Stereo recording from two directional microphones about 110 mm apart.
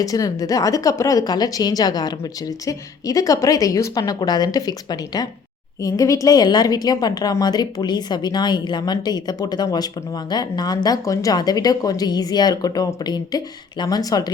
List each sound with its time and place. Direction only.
0.0 s a woman's voice: 30° left (ahead or behind)